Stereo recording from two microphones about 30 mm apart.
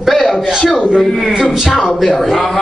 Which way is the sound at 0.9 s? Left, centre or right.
Centre.